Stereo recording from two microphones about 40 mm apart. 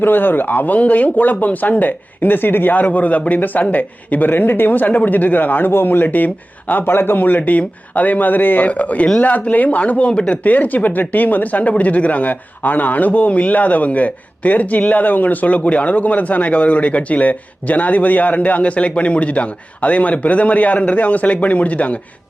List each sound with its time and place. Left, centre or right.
0.0 s speech: left
2.7 s speech: left
6.8 s a man's voice: left
7.2 s a man's voice: left
10.1 s speech: left
10.4 s a man's voice: left